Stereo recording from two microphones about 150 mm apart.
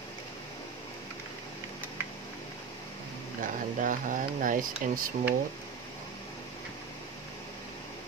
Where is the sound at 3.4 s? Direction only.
60° right (ahead or behind).